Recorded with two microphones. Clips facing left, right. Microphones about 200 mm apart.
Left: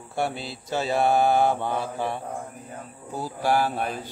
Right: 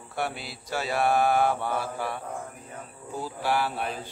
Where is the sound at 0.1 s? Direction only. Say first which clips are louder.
Left 4 dB; 25° left (ahead or behind).